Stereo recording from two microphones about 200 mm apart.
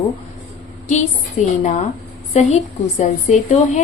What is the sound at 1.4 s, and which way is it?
A woman's voice, 35° left (ahead or behind).